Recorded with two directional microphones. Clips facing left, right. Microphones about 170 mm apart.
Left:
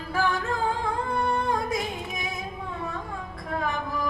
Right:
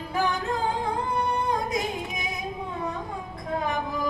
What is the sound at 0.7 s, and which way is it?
Singing, 20° right (ahead or behind).